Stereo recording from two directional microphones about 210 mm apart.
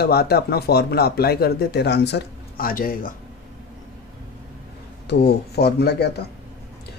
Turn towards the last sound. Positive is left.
turn(degrees=50)  # may be behind; listen again after turning